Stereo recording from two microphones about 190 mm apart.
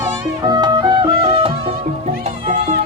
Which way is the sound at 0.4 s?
20° right (ahead or behind).